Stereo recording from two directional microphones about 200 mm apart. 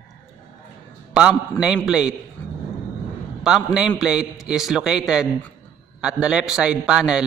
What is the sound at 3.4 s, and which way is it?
A man's voice, 5° right (ahead or behind).